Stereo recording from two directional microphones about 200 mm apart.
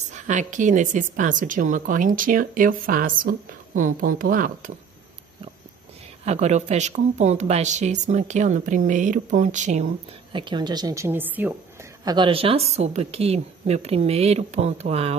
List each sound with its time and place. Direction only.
0.1 s a woman's voice: 40° right (ahead or behind)
6.2 s a woman's voice: 35° right (ahead or behind)
10.3 s speech: 20° right (ahead or behind)
12.0 s a woman's voice: 20° right (ahead or behind)